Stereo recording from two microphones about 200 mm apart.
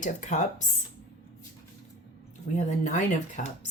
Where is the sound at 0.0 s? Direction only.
40° left (ahead or behind).